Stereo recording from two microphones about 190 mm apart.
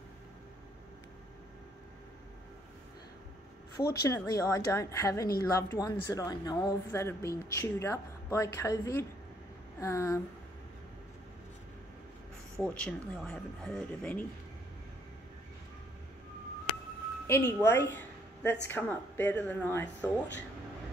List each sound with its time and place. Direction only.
3.7 s a woman's voice: 15° left (ahead or behind)
12.5 s a woman's voice: 5° left (ahead or behind)
17.3 s a woman's voice: 15° left (ahead or behind)